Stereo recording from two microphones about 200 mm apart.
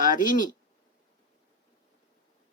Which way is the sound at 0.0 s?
40° left (ahead or behind).